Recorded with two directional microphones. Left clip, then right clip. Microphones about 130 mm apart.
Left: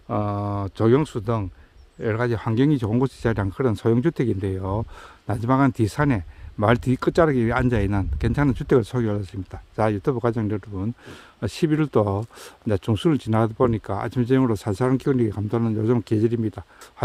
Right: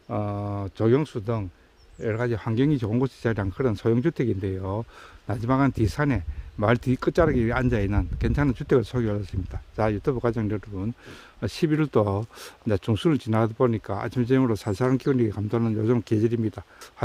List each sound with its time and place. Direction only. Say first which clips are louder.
0.1 s speech: left 4 dB; 35° left (ahead or behind); by 16.6 s 15° left (ahead or behind)